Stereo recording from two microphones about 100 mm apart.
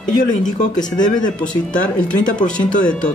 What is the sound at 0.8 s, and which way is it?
Speech, 45° left (ahead or behind).